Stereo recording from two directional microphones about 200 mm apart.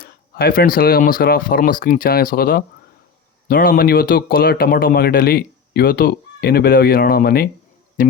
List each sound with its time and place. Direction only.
0.0 s speech: 50° left (ahead or behind)